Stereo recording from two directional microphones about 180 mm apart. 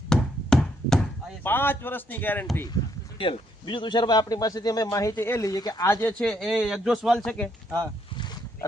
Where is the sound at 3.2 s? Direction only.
30° left (ahead or behind); by 7.5 s 5° left (ahead or behind).